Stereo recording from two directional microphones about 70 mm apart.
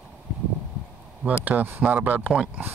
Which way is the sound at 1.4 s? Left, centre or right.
Right.